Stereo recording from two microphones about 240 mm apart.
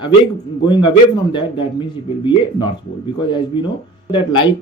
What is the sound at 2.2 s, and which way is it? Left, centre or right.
Speech, centre.